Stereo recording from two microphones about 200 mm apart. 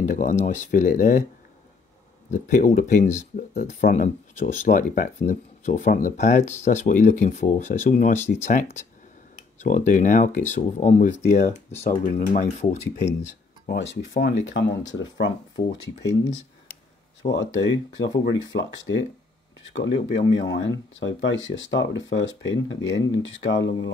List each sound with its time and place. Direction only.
0.0 s speech: 40° left (ahead or behind)
2.3 s speech: 40° left (ahead or behind)
13.7 s speech: 60° left (ahead or behind)
17.3 s speech: 60° left (ahead or behind)